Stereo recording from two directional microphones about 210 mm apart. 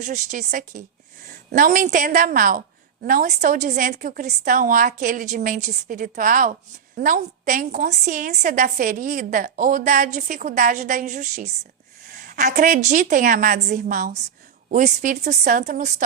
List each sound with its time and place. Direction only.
0.0 s a woman's voice: 35° right (ahead or behind)